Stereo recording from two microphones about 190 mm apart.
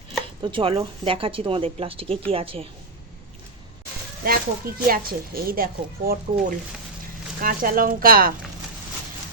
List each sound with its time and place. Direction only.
0.4 s speech: 25° right (ahead or behind)
4.2 s speech: 50° right (ahead or behind)
7.4 s speech: 50° right (ahead or behind)